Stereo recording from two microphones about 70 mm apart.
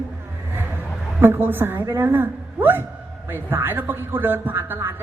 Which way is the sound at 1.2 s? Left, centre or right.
Right.